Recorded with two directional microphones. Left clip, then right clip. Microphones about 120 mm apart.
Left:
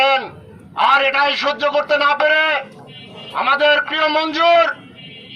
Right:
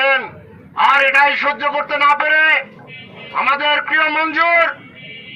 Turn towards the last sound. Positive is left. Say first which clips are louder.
# even
turn(degrees=30)  # may be behind; listen again after turning